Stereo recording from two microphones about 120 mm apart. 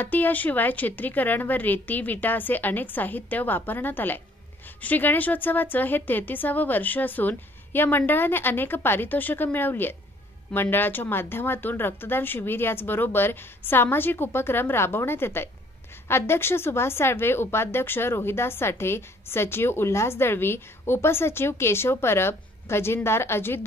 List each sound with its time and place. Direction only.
0.0 s a woman's voice: 15° left (ahead or behind)